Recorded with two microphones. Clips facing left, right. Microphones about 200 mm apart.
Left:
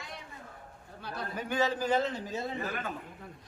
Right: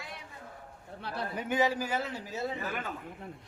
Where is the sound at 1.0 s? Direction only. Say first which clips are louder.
Right 1 dB; 30° right (ahead or behind); by 2.4 s 10° right (ahead or behind).